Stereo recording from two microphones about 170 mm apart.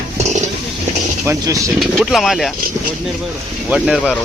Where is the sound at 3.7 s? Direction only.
Centre (ahead or behind).